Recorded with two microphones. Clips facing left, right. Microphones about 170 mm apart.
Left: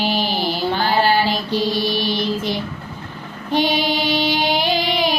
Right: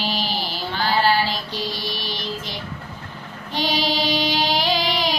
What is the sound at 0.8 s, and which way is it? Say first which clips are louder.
Female singing: left 1 dB; 50° left (ahead or behind).